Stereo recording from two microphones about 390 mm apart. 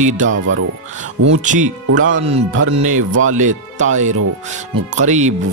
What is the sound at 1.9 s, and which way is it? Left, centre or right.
Speech, right.